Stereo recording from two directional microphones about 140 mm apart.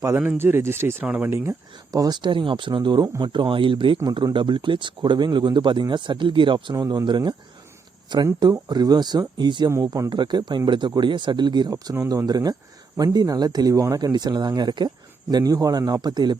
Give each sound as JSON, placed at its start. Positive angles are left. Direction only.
{"t": 0.0, "sound": "speech", "side_deg": -20}